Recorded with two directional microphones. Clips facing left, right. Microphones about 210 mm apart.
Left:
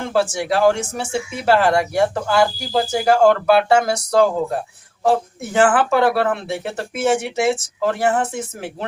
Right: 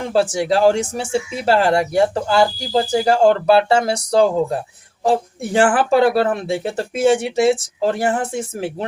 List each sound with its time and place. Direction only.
0.1 s speech: 30° right (ahead or behind)